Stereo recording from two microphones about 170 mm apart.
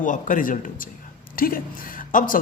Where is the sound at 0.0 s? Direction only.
50° left (ahead or behind).